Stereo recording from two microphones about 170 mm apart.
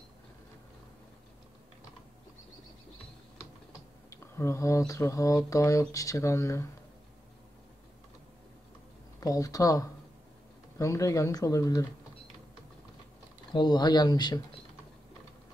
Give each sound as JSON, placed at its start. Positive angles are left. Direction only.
{"t": 4.1, "sound": "speech", "side_deg": 15}
{"t": 9.2, "sound": "speech", "side_deg": 20}
{"t": 13.5, "sound": "speech", "side_deg": 25}